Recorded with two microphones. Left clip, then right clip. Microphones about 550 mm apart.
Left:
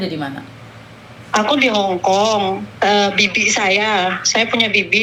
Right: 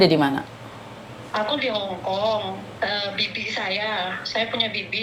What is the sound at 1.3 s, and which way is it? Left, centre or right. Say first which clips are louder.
A woman's voice: left 9 dB; left.